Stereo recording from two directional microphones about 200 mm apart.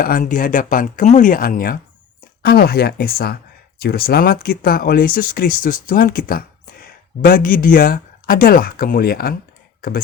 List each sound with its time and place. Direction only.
0.0 s speech: 45° left (ahead or behind)